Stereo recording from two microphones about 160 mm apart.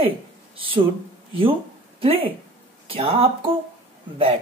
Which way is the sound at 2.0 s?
35° right (ahead or behind).